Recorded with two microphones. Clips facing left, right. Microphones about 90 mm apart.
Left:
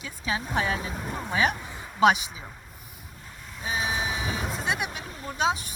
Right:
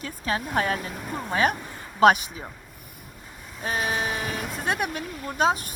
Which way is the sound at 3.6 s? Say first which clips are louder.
Right 2 dB; 55° right (ahead or behind).